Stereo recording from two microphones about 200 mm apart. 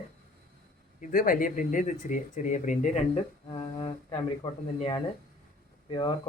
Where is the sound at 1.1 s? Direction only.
45° left (ahead or behind).